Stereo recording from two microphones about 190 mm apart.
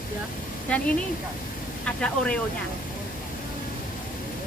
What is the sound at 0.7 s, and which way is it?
A woman's voice, 5° left (ahead or behind).